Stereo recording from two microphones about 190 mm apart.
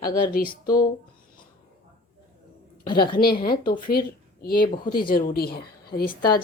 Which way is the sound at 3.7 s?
50° left (ahead or behind).